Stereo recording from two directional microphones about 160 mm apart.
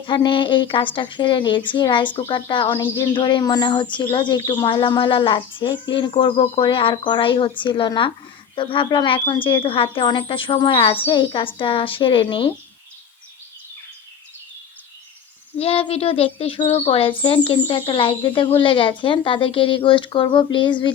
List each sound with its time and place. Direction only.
0.0 s speech: 30° left (ahead or behind)
15.5 s speech: 35° left (ahead or behind)